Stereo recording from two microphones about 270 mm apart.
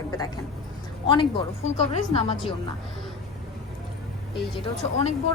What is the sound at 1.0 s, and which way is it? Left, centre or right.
A woman's voice, centre.